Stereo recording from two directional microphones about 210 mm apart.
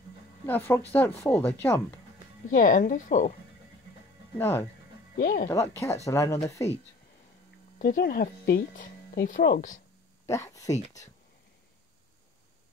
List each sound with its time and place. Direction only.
0.5 s speech: 10° left (ahead or behind)
2.5 s speech: 40° left (ahead or behind)
4.4 s speech: 10° left (ahead or behind)
5.2 s speech: 40° left (ahead or behind)
6.0 s speech: 15° left (ahead or behind)
7.8 s speech: 45° left (ahead or behind)
10.2 s speech: 15° left (ahead or behind)